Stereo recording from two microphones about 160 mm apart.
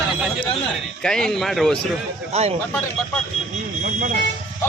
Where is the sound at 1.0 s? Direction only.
5° left (ahead or behind).